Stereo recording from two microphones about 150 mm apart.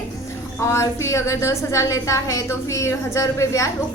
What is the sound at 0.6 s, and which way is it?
A woman's voice, 20° left (ahead or behind).